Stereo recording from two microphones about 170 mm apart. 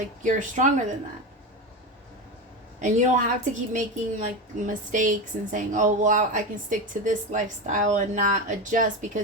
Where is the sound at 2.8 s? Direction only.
45° right (ahead or behind).